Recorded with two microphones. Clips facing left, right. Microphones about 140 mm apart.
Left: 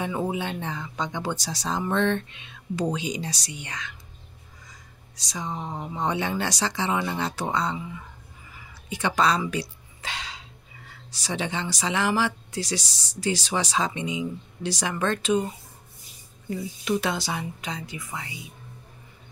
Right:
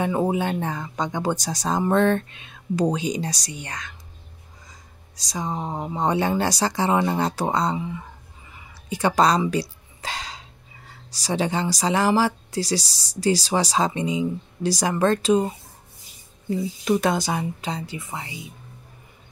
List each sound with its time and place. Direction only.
0.0 s speech: 45° right (ahead or behind)
5.1 s speech: 40° right (ahead or behind)
8.8 s speech: 40° right (ahead or behind)
9.4 s a sound: 35° right (ahead or behind)
10.9 s speech: 35° right (ahead or behind)
17.0 s speech: 45° right (ahead or behind)
17.6 s speech: 30° right (ahead or behind)